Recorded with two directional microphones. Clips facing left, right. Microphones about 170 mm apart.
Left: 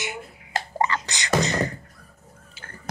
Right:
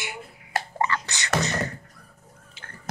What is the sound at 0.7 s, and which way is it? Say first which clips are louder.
Speech: left 3 dB; 20° left (ahead or behind).